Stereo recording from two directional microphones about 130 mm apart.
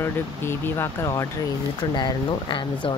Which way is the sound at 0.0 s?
20° left (ahead or behind).